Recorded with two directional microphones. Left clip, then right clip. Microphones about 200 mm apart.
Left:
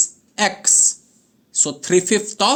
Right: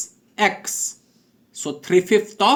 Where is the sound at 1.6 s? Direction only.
35° left (ahead or behind).